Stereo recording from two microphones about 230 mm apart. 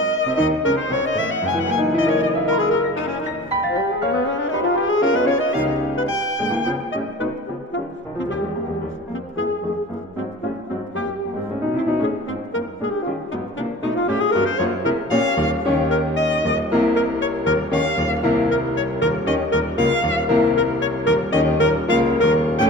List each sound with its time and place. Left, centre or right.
0.0 s music: left
4.3 s music: left
12.5 s brass instrument: left
13.8 s music: left